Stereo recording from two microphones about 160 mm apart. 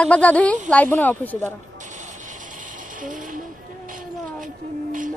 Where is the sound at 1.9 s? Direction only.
50° right (ahead or behind).